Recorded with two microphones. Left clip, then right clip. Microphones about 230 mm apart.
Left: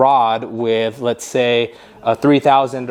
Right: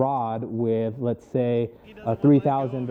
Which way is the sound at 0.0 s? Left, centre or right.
Centre.